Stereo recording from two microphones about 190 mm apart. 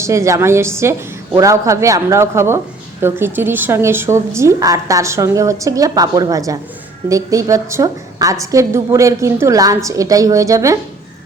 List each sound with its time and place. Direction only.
0.0 s a woman's voice: 15° right (ahead or behind)